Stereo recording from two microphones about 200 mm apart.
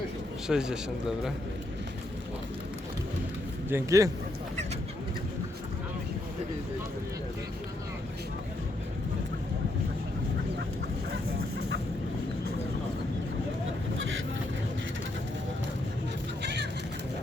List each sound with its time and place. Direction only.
0.4 s a man's voice: 5° right (ahead or behind)
3.7 s a man's voice: 15° right (ahead or behind)
11.1 s fowl: 55° right (ahead or behind)
16.4 s music: 60° right (ahead or behind)